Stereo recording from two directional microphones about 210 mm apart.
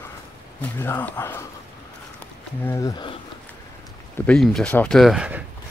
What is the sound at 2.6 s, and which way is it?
Speech, 15° left (ahead or behind).